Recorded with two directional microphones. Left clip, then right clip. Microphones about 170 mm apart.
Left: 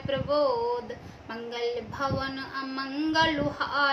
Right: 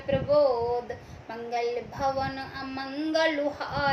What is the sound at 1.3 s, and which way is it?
A woman's voice, 20° left (ahead or behind).